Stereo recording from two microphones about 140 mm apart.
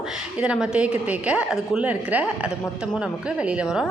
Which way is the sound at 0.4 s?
5° right (ahead or behind).